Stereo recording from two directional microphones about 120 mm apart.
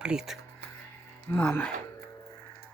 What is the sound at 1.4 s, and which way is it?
Speech, 15° left (ahead or behind).